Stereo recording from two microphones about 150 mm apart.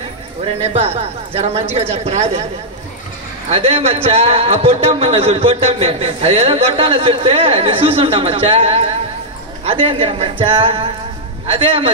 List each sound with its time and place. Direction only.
0.6 s speech: 45° right (ahead or behind)
3.4 s a man's voice: 45° right (ahead or behind)